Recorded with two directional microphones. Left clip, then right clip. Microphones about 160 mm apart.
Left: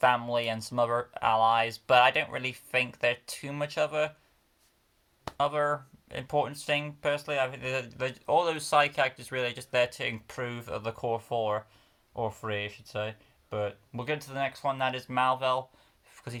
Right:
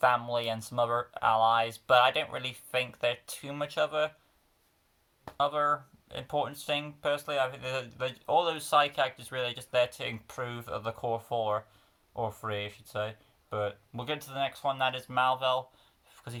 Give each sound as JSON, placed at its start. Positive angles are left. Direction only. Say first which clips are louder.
{"t": 0.0, "sound": "speech", "louder": "left 1 dB", "side_deg": 30}
{"t": 5.4, "sound": "speech", "louder": "even", "side_deg": 30}
{"t": 16.1, "sound": "a sound", "louder": "left 3 dB", "side_deg": 40}